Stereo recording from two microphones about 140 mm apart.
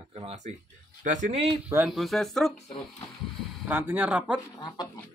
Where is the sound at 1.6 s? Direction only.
10° right (ahead or behind).